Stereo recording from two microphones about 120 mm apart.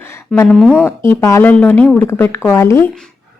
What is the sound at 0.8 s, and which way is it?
A woman's voice, 20° left (ahead or behind).